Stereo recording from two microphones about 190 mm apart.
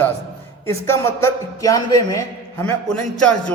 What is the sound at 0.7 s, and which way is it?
A man's voice, 15° left (ahead or behind).